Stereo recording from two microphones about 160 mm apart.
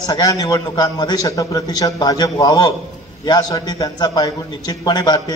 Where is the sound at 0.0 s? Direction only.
20° left (ahead or behind).